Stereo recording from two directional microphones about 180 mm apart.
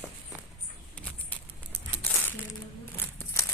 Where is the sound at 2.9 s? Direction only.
15° left (ahead or behind).